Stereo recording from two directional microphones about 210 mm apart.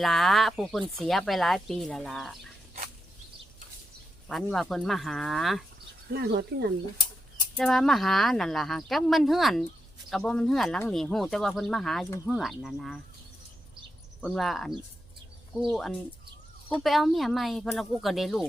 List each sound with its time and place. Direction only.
0.0 s speech: centre (ahead or behind)
4.3 s speech: centre (ahead or behind)
6.1 s speech: 50° right (ahead or behind)
7.5 s speech: centre (ahead or behind)
14.2 s speech: centre (ahead or behind)